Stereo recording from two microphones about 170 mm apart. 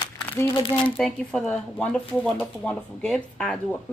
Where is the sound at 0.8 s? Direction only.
5° left (ahead or behind).